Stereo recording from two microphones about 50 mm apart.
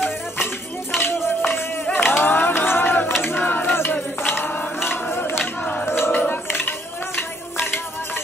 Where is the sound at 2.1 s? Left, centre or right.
Left.